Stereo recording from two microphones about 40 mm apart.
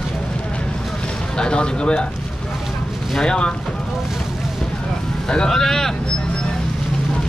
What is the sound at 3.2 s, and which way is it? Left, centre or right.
Speech, left.